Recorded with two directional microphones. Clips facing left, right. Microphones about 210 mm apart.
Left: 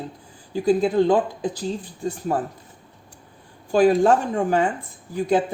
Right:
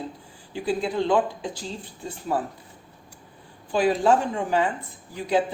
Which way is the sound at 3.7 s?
45° left (ahead or behind).